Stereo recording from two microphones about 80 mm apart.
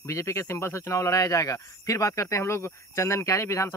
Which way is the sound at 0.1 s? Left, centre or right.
Left.